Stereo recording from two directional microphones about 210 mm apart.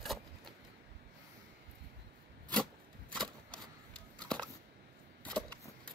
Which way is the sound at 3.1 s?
5° left (ahead or behind).